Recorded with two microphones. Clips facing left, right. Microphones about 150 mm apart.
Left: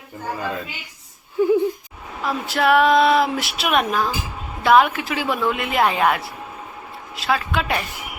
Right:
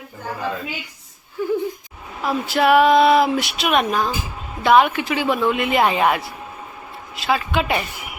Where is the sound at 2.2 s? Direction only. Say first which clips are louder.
Right 2 dB; centre (ahead or behind).